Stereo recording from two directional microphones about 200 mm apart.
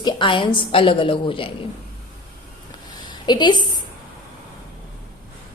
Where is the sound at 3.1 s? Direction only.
20° left (ahead or behind).